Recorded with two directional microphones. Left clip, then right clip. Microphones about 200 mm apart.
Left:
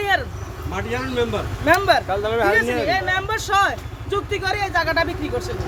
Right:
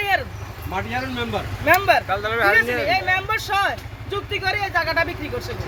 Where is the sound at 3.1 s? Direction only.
5° left (ahead or behind).